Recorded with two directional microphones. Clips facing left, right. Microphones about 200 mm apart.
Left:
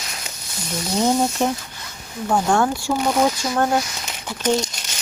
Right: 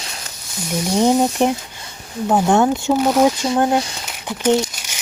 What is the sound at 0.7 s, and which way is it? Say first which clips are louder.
Speech: right 4 dB; 15° right (ahead or behind).